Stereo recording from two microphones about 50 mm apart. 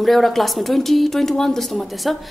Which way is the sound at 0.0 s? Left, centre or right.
Centre.